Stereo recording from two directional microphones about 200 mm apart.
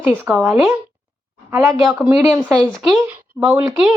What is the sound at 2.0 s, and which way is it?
Speech, 10° right (ahead or behind).